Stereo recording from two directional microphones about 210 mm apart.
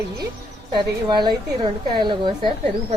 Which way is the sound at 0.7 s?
20° right (ahead or behind).